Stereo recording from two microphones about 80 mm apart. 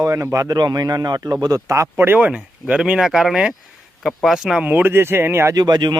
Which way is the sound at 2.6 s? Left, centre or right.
Centre.